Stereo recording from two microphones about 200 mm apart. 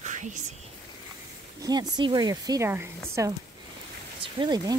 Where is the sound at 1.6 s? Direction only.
20° right (ahead or behind).